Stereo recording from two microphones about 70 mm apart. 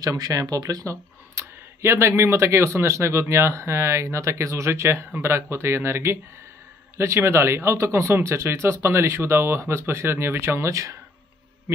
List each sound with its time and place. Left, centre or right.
0.0 s speech: right
1.3 s speech: right